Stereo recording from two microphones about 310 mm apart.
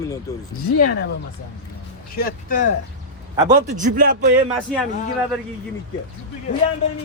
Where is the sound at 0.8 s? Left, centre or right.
Left.